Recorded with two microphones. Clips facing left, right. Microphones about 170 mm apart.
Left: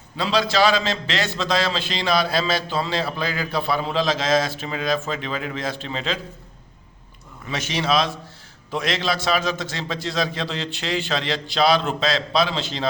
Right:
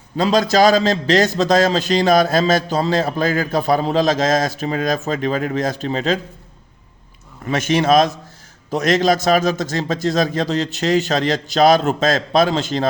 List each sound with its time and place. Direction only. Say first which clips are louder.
0.2 s a man's voice: right 6 dB; 45° right (ahead or behind)
7.4 s a man's voice: right 8 dB; 50° right (ahead or behind)